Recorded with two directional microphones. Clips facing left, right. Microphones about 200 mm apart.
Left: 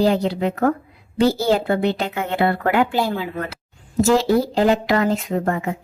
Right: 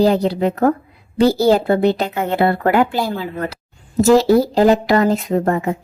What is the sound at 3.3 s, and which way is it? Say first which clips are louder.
A woman's voice: right 3 dB; 35° right (ahead or behind).